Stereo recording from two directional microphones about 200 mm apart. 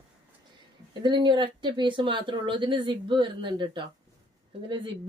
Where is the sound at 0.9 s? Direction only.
20° right (ahead or behind).